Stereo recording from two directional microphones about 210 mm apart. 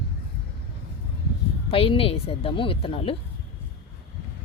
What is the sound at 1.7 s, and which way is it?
A woman's voice, 25° left (ahead or behind).